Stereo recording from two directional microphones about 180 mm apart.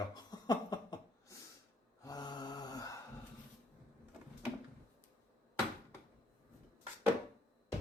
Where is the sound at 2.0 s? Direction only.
20° left (ahead or behind).